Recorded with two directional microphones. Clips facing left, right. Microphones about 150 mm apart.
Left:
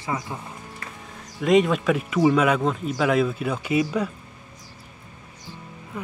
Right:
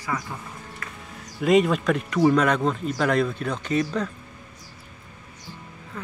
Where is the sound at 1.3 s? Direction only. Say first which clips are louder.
Even; centre (ahead or behind).